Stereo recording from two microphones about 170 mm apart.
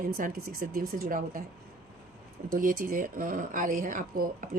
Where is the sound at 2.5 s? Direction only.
55° right (ahead or behind).